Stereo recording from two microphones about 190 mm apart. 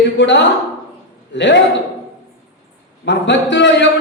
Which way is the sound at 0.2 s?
70° left (ahead or behind).